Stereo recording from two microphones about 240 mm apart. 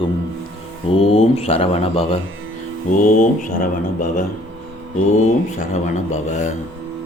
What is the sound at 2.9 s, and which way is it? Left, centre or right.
Mantra, left.